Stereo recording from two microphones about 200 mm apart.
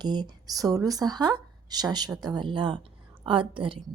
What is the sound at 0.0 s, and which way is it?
A woman's voice, 20° right (ahead or behind).